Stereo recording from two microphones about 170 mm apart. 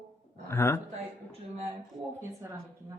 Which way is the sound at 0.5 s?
15° left (ahead or behind).